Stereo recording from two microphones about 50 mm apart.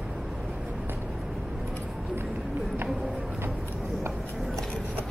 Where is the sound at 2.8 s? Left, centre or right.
Centre.